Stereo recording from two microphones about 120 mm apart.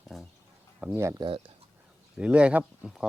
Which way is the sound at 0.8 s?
15° right (ahead or behind).